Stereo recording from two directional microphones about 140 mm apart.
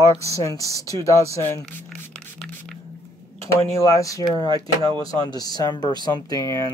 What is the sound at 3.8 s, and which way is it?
Speech, 25° left (ahead or behind).